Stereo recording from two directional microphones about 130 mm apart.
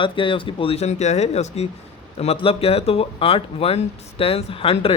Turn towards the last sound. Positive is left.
turn(degrees=45)  # may be behind; listen again after turning